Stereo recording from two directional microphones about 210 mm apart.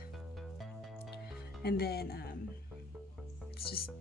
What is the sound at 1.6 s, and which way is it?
Speech, 50° left (ahead or behind).